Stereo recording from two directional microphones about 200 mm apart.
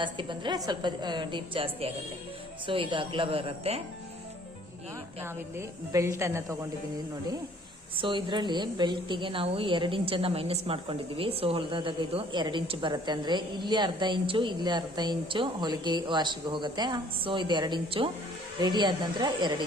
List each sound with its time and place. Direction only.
0.0 s a woman's voice: 25° right (ahead or behind)
5.2 s a woman's voice: 15° right (ahead or behind)
7.9 s a woman's voice: 25° right (ahead or behind)